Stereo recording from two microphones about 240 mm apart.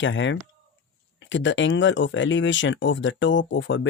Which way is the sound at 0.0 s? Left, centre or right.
Left.